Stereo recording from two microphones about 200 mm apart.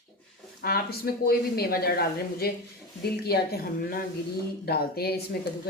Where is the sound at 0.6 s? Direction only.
50° left (ahead or behind).